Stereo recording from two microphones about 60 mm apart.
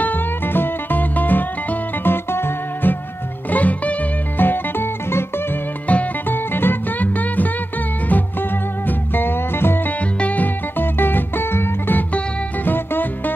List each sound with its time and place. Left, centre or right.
0.0 s music: left
3.4 s music: left
5.9 s music: left
6.2 s music: left
10.1 s music: left